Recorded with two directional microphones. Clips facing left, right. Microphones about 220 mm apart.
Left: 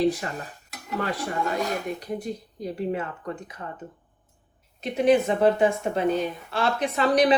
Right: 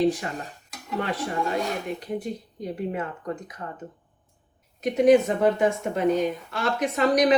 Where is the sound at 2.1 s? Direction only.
35° left (ahead or behind).